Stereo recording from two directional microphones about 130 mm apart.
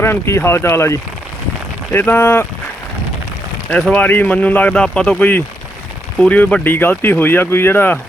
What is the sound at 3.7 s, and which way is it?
Speech, 10° left (ahead or behind).